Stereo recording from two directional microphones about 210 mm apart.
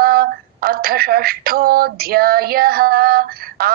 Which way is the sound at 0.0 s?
45° right (ahead or behind).